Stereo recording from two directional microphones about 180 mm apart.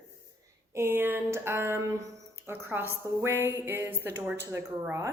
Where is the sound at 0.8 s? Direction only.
10° right (ahead or behind).